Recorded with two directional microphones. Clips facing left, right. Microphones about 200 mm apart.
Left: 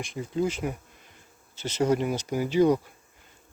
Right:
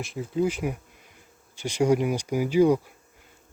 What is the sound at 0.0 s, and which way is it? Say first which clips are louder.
Speech: right 2 dB; centre (ahead or behind).